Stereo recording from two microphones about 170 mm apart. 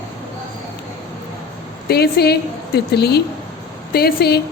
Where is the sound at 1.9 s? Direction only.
70° left (ahead or behind).